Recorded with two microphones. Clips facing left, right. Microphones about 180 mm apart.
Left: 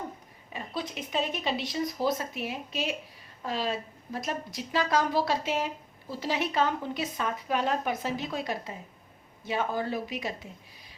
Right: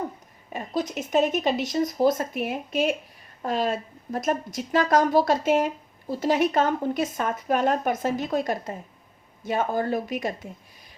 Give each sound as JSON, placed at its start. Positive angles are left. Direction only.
{"t": 0.5, "sound": "a woman's voice", "side_deg": -45}